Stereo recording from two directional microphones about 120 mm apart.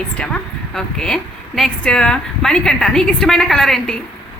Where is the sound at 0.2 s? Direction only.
5° left (ahead or behind).